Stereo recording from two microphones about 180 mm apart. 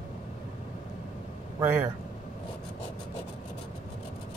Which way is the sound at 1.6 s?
10° right (ahead or behind).